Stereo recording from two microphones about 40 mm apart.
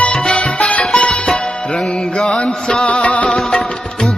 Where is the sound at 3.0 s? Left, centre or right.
Left.